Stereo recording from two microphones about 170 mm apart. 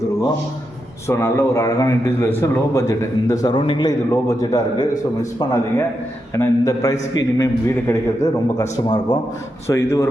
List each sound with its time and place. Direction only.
1.0 s a man's voice: 15° left (ahead or behind)